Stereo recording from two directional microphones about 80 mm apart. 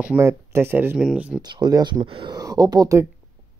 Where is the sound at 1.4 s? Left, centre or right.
Right.